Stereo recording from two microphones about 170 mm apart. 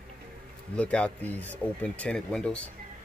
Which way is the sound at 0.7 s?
5° left (ahead or behind).